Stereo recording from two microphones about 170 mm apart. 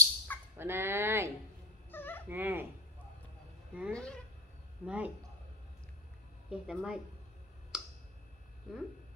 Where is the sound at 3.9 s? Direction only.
5° left (ahead or behind).